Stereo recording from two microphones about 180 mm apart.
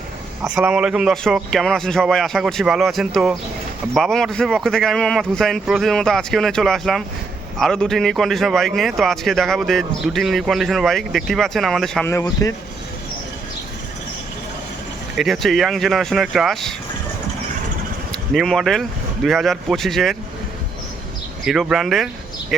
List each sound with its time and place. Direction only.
0.4 s speech: 5° right (ahead or behind)
12.0 s a man's voice: 15° left (ahead or behind)
15.1 s speech: centre (ahead or behind)
18.1 s speech: centre (ahead or behind)
21.4 s speech: centre (ahead or behind)